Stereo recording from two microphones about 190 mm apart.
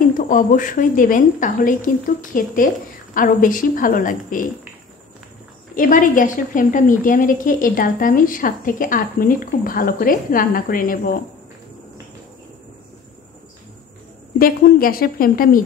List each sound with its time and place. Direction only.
0.3 s a woman's voice: 45° left (ahead or behind)
5.8 s a woman's voice: 45° left (ahead or behind)
14.4 s a woman's voice: 50° left (ahead or behind)